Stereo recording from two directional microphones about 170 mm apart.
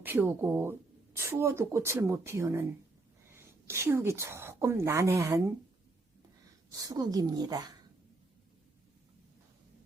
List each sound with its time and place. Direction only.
0.0 s a woman's voice: 10° right (ahead or behind)
6.8 s speech: 20° right (ahead or behind)